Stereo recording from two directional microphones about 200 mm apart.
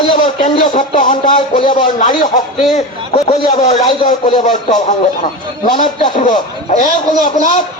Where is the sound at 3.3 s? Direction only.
35° left (ahead or behind).